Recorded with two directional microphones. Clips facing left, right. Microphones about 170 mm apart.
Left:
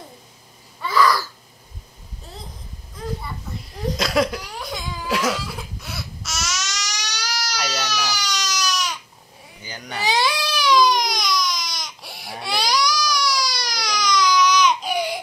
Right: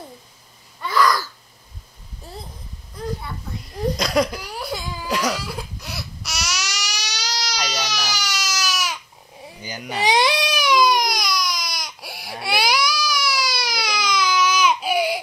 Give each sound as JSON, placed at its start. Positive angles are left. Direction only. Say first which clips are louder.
{"t": 0.7, "sound": "babbling", "louder": "left 1 dB", "side_deg": 5}
{"t": 3.9, "sound": "cough", "louder": "left 1 dB", "side_deg": 0}
{"t": 7.1, "sound": "baby cry", "louder": "even", "side_deg": -15}